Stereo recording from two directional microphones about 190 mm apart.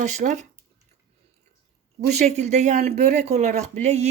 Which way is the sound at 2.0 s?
35° right (ahead or behind).